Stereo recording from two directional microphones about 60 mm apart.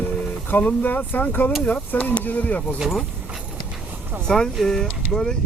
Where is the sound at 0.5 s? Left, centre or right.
Left.